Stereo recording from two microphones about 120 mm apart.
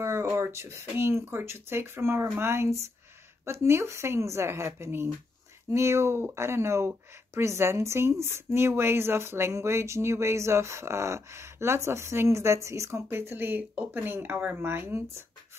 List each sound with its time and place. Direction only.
0.0 s speech: 25° right (ahead or behind)